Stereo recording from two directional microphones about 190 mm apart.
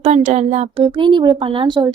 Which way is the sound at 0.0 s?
40° right (ahead or behind).